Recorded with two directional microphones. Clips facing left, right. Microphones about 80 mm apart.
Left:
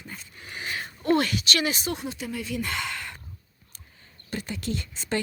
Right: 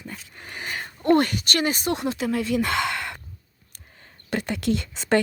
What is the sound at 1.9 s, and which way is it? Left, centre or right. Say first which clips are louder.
Speech: right 8 dB; right.